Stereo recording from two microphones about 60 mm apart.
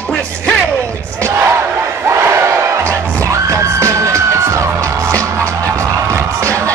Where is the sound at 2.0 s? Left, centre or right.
Right.